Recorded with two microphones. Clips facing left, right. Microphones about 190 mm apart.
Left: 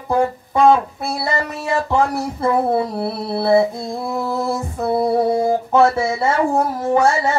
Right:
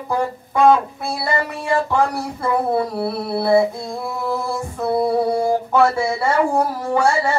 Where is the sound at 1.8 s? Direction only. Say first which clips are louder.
Left 1 dB; 25° left (ahead or behind).